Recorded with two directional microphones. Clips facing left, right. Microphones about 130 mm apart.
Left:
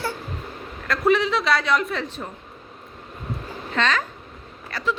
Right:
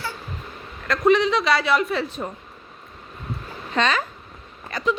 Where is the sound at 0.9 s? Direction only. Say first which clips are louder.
Right 2 dB; centre (ahead or behind).